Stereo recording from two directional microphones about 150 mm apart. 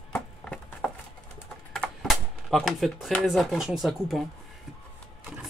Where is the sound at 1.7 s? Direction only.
Centre (ahead or behind).